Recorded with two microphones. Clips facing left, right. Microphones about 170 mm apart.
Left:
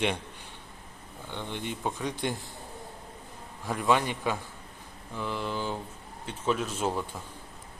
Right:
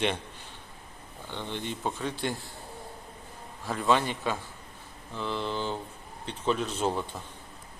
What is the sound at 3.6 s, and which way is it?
Speech, 15° left (ahead or behind).